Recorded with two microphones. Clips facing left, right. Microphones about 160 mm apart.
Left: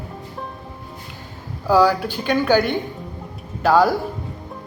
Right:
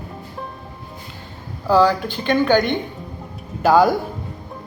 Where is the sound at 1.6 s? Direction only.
10° left (ahead or behind).